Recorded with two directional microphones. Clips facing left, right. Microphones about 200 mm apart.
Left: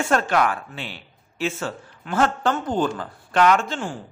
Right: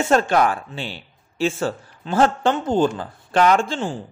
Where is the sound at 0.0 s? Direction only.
30° right (ahead or behind).